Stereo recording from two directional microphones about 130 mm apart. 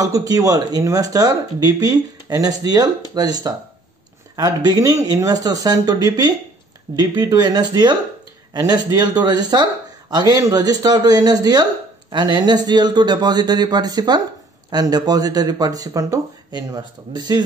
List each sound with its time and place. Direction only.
0.0 s speech: 25° right (ahead or behind)